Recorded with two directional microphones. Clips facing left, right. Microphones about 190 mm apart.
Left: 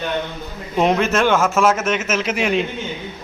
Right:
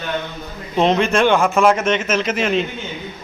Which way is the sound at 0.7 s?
10° left (ahead or behind).